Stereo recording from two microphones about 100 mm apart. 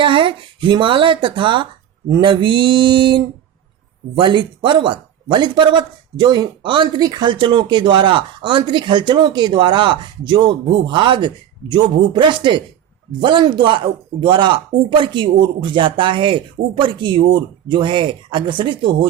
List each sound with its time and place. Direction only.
0.0 s speech: 55° right (ahead or behind)
2.0 s a man's voice: 45° right (ahead or behind)
2.3 s a man's voice: 55° right (ahead or behind)